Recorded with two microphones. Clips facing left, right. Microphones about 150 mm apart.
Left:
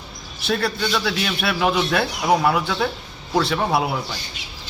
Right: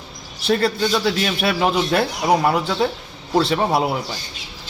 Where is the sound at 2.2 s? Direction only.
30° right (ahead or behind).